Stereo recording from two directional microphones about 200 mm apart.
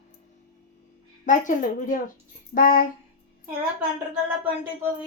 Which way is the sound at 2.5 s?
45° left (ahead or behind).